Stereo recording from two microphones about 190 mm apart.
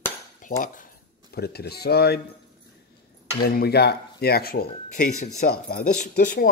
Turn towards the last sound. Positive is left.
turn(degrees=50)  # may be behind; listen again after turning